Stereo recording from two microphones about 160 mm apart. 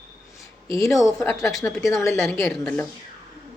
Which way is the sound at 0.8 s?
Centre (ahead or behind).